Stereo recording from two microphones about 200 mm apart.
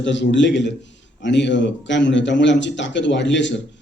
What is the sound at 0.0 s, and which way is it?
A man's voice, 65° left (ahead or behind).